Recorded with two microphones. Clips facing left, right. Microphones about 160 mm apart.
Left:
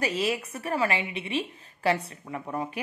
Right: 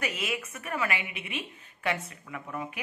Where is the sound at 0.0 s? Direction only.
35° left (ahead or behind).